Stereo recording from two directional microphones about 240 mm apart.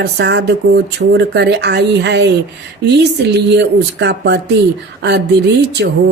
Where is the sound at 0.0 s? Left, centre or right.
Right.